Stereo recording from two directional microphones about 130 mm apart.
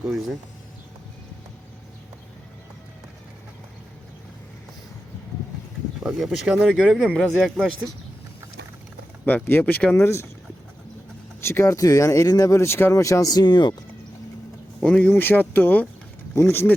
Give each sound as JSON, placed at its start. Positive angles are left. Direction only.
{"t": 6.0, "sound": "speech", "side_deg": -5}
{"t": 9.2, "sound": "speech", "side_deg": 15}
{"t": 11.3, "sound": "speech", "side_deg": 20}
{"t": 14.8, "sound": "speech", "side_deg": 10}